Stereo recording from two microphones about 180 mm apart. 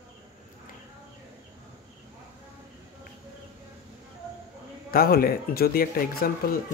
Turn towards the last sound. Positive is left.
turn(degrees=55)  # may be behind; listen again after turning